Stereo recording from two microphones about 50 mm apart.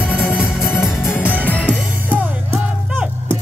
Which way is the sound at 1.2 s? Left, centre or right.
Right.